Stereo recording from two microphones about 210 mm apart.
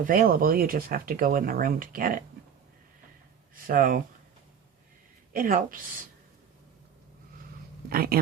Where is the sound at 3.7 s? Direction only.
40° right (ahead or behind).